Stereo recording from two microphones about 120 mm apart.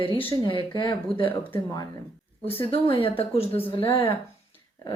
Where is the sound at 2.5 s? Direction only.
50° left (ahead or behind).